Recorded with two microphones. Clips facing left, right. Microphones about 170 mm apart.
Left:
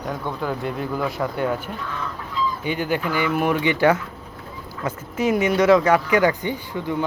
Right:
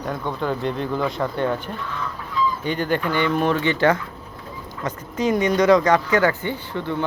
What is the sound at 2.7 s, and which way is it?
Speech, 10° left (ahead or behind).